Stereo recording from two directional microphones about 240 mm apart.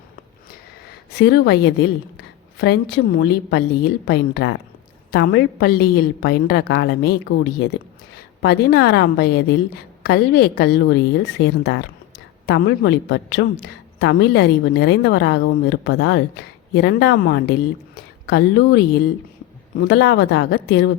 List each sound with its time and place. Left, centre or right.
1.1 s a woman's voice: left
19.8 s a woman's voice: left